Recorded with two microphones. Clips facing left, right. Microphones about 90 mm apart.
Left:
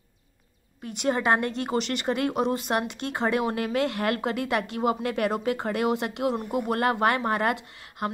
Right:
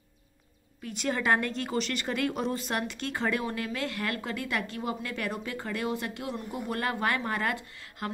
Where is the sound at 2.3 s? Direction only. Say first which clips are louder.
Left 5 dB; 55° left (ahead or behind).